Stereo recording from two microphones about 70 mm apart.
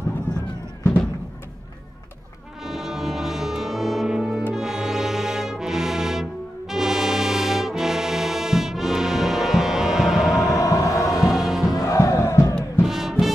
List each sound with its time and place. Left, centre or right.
0.3 s a sound: left
2.6 s brass instrument: centre
10.5 s music: left
11.1 s music: centre
11.7 s music: left
12.8 s music: centre